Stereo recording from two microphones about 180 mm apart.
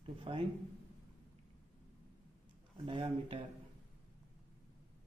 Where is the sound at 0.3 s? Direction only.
35° right (ahead or behind).